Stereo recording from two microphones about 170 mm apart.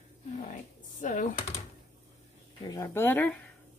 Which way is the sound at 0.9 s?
45° left (ahead or behind).